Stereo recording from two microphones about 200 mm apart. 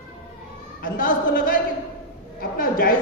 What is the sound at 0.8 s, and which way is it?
A woman's voice, 45° left (ahead or behind).